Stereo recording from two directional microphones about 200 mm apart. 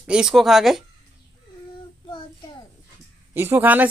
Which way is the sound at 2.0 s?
25° left (ahead or behind).